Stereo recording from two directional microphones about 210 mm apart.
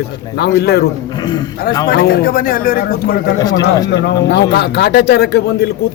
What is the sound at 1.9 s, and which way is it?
A man's voice, 45° left (ahead or behind).